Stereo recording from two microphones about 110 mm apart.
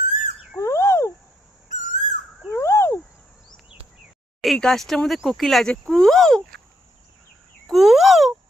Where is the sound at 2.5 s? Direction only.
25° left (ahead or behind).